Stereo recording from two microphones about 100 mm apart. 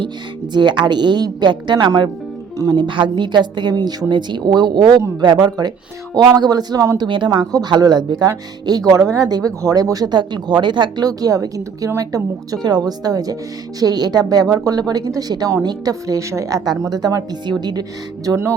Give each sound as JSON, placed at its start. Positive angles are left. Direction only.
{"t": 0.5, "sound": "a woman's voice", "side_deg": -50}
{"t": 18.3, "sound": "music", "side_deg": -30}